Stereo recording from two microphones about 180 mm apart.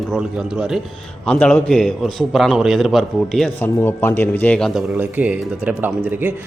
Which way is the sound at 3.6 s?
10° left (ahead or behind).